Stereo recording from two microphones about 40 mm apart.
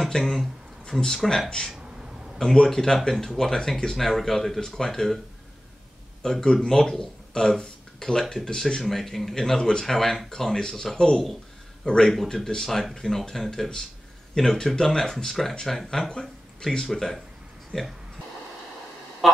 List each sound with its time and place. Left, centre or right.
0.3 s a sound: centre
1.2 s speech: centre
6.4 s speech: centre
8.8 s speech: centre
15.2 s speech: centre
16.1 s speech: centre
19.2 s a sound: centre